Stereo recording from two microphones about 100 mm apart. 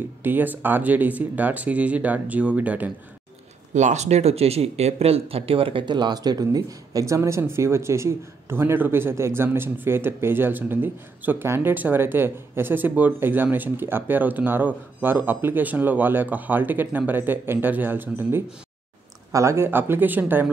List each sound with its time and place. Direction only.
0.2 s speech: 20° right (ahead or behind)
4.1 s speech: 90° right; by 20.4 s 20° right (ahead or behind)